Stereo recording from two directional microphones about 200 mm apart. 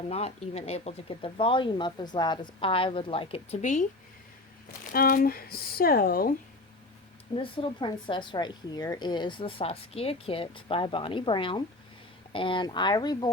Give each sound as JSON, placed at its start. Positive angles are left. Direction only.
{"t": 0.1, "sound": "speech", "side_deg": 30}
{"t": 4.9, "sound": "speech", "side_deg": 45}
{"t": 7.3, "sound": "speech", "side_deg": 25}